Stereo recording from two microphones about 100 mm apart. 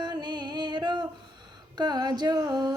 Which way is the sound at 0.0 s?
45° right (ahead or behind).